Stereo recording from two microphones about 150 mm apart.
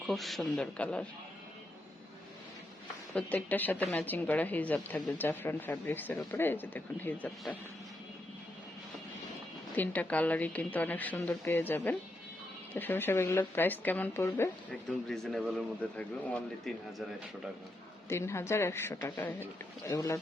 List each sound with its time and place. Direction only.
0.0 s speech: centre (ahead or behind)
3.2 s speech: 10° left (ahead or behind)
9.7 s speech: 10° left (ahead or behind)
14.8 s speech: 5° left (ahead or behind)
18.1 s speech: 15° left (ahead or behind)